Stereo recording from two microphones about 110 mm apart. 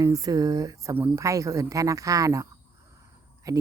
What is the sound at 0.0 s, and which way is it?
Speech, 30° right (ahead or behind).